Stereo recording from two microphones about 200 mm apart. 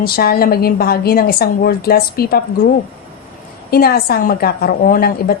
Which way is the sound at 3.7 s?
50° left (ahead or behind).